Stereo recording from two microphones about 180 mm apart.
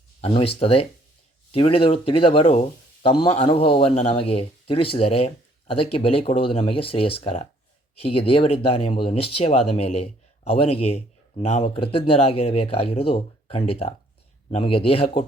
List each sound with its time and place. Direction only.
0.2 s speech: 30° left (ahead or behind)